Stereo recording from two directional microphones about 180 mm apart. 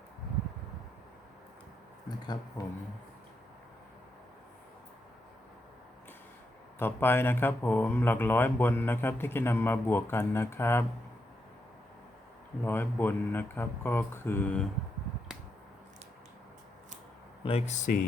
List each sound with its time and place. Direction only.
2.0 s speech: 25° left (ahead or behind)
6.7 s speech: 10° left (ahead or behind)
12.6 s speech: 10° left (ahead or behind)
17.4 s speech: 35° left (ahead or behind)